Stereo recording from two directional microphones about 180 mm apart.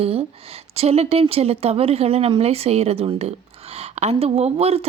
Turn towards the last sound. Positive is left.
turn(degrees=-35)  # may be behind; listen again after turning